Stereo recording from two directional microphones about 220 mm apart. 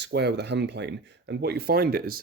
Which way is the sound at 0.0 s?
50° right (ahead or behind).